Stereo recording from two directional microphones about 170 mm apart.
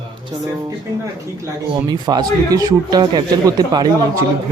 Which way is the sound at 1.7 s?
25° right (ahead or behind).